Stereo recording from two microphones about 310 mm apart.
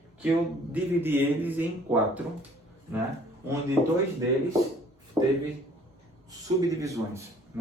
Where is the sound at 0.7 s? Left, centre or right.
Centre.